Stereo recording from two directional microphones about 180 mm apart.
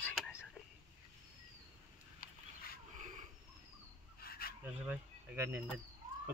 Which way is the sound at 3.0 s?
45° right (ahead or behind).